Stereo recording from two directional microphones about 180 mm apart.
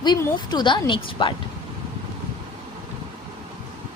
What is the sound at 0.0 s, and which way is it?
A woman's voice, 25° left (ahead or behind).